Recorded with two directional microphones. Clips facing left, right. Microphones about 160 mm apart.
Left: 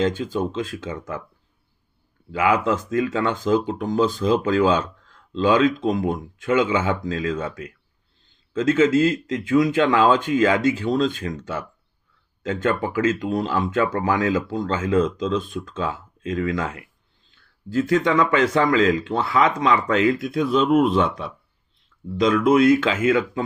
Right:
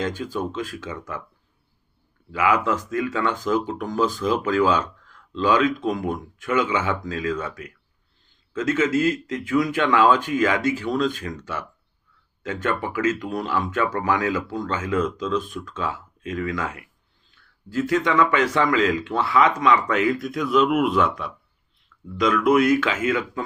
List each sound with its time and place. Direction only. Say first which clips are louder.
0.0 s speech: left 4 dB; 25° left (ahead or behind)
2.3 s speech: left 1 dB; 30° left (ahead or behind)